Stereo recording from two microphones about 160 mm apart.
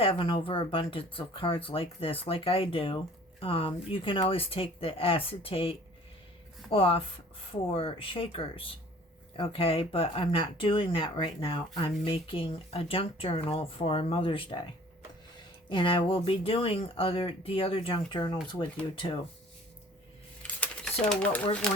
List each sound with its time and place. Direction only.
0.0 s speech: 35° left (ahead or behind)
15.7 s speech: 30° left (ahead or behind)
21.1 s speech: 5° left (ahead or behind)